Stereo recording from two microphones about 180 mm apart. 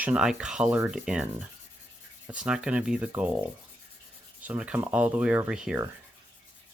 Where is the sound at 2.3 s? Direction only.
5° right (ahead or behind).